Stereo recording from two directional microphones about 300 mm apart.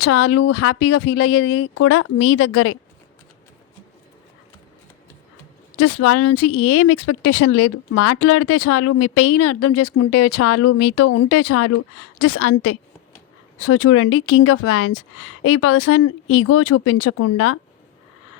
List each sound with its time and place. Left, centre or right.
0.0 s speech: left
1.3 s speech: left
5.7 s speech: left